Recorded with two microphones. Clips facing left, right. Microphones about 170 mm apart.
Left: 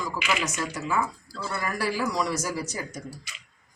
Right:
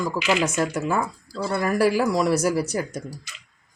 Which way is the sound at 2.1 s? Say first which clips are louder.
Right 7 dB; 50° right (ahead or behind).